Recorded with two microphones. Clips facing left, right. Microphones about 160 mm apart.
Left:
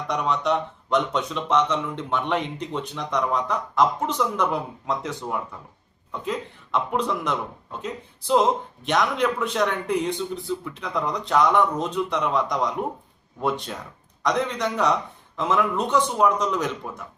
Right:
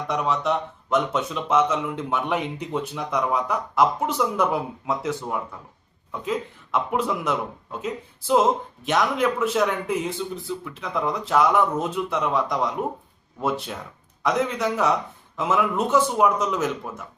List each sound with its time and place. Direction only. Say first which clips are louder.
0.1 s speech: even; 5° right (ahead or behind)